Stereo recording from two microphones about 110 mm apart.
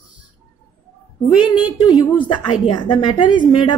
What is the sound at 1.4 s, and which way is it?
A woman's voice, 45° left (ahead or behind).